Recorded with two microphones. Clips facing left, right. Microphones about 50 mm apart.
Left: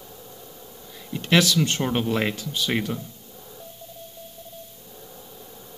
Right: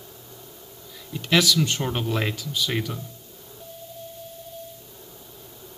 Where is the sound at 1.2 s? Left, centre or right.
Left.